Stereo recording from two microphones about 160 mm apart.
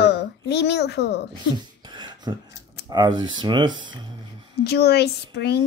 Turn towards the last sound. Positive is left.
turn(degrees=90)